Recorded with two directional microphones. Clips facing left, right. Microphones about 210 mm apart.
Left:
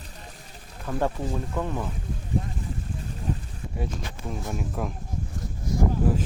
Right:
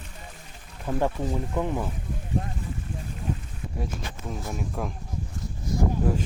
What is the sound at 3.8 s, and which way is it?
Speech, centre (ahead or behind).